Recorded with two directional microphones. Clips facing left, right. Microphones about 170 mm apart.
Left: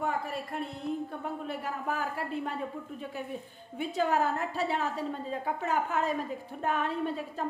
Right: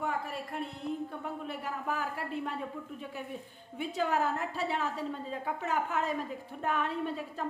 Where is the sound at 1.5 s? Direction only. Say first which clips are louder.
Left 1 dB; 35° left (ahead or behind).